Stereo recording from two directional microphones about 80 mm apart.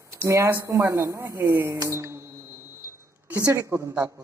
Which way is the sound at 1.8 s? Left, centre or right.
Right.